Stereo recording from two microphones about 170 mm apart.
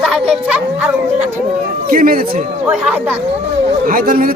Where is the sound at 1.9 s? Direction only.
55° right (ahead or behind).